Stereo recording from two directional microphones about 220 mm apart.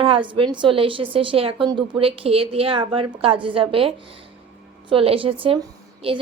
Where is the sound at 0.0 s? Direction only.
25° right (ahead or behind).